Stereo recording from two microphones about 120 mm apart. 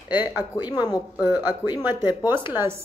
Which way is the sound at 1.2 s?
15° right (ahead or behind).